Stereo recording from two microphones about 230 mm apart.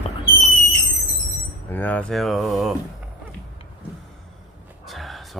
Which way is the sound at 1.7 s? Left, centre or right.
Centre.